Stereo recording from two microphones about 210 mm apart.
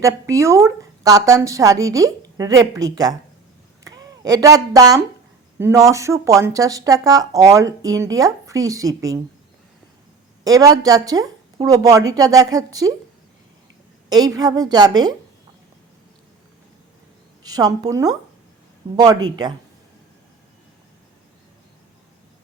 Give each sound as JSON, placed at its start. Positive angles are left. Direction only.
{"t": 0.0, "sound": "speech", "side_deg": -15}
{"t": 10.4, "sound": "speech", "side_deg": -15}
{"t": 14.1, "sound": "a woman's voice", "side_deg": -20}
{"t": 17.4, "sound": "a woman's voice", "side_deg": -20}